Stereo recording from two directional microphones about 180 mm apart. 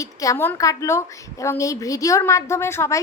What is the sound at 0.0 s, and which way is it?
A woman's voice, 20° left (ahead or behind).